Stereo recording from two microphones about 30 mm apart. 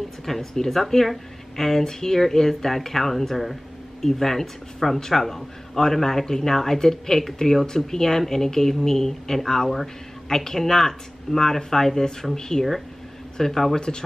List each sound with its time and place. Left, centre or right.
0.2 s speech: centre
13.7 s speech: left